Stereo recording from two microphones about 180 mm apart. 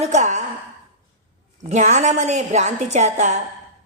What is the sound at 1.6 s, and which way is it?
A woman's voice, 45° right (ahead or behind).